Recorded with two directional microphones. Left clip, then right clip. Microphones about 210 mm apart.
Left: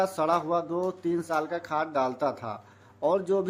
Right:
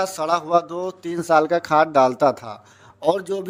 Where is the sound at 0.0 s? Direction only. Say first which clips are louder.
Right 4 dB; 40° right (ahead or behind).